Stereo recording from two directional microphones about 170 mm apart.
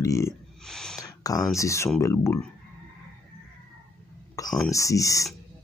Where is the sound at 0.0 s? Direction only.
20° left (ahead or behind).